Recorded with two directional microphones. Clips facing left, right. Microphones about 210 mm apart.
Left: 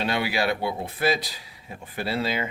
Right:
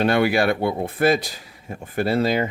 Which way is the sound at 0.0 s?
50° right (ahead or behind).